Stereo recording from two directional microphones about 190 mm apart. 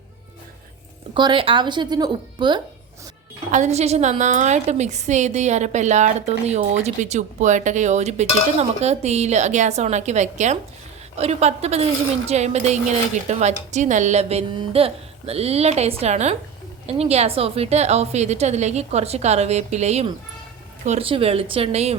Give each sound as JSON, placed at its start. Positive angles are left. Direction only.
{"t": 1.1, "sound": "speech", "side_deg": -25}
{"t": 3.5, "sound": "a woman's voice", "side_deg": -35}